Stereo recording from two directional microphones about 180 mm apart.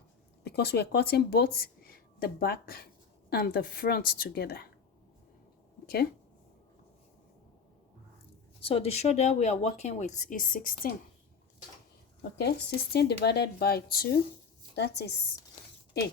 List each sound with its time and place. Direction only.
0.4 s a woman's voice: 65° left (ahead or behind)
5.8 s speech: 60° left (ahead or behind)
8.6 s speech: 35° left (ahead or behind); by 10.8 s 50° left (ahead or behind)
12.4 s speech: 65° left (ahead or behind)
14.8 s a woman's voice: 70° left (ahead or behind)